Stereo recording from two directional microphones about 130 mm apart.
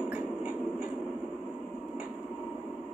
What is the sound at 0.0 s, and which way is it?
Train, 10° right (ahead or behind).